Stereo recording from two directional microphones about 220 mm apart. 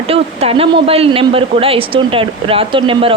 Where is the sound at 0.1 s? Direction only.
25° right (ahead or behind).